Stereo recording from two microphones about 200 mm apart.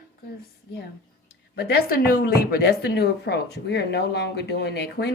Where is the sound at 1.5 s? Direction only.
50° left (ahead or behind).